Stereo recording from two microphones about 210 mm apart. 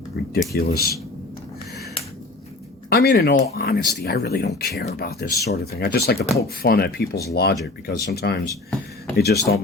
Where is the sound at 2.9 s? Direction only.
50° left (ahead or behind).